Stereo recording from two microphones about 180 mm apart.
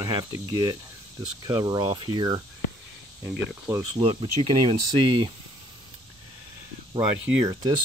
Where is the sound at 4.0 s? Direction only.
30° right (ahead or behind).